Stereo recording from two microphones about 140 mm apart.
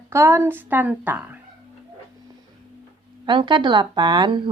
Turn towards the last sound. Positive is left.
turn(degrees=-35)  # may be behind; listen again after turning